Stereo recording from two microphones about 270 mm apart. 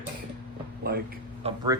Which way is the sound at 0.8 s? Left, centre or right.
Right.